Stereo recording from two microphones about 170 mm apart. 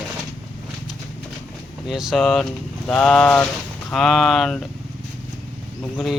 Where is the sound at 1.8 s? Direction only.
Centre (ahead or behind).